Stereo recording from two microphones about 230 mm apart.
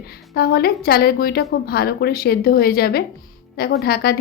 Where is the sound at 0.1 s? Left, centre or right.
Left.